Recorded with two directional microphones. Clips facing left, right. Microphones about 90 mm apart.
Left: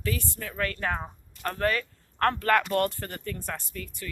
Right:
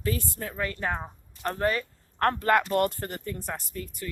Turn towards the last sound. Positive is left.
turn(degrees=-30)  # may be behind; listen again after turning